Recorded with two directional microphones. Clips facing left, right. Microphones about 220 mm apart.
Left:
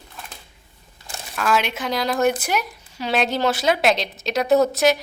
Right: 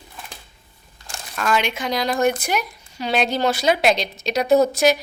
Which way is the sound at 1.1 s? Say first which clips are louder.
Even; 5° left (ahead or behind).